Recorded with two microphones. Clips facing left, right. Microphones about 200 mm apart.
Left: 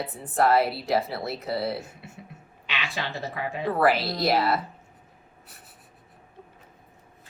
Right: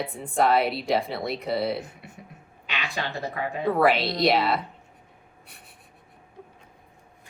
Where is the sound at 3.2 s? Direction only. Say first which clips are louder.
Right 3 dB; 5° left (ahead or behind).